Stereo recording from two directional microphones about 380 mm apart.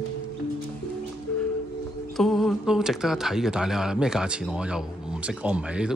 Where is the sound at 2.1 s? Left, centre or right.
Centre.